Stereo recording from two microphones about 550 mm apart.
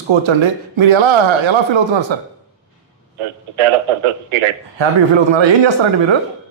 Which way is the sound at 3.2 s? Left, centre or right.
Right.